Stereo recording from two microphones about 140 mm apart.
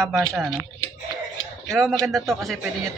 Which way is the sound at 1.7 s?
Centre (ahead or behind).